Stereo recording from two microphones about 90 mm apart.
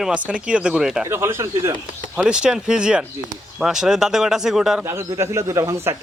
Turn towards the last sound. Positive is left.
turn(degrees=-35)  # may be behind; listen again after turning